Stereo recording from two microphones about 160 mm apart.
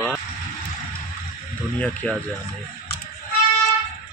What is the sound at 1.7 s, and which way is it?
Speech, 10° left (ahead or behind).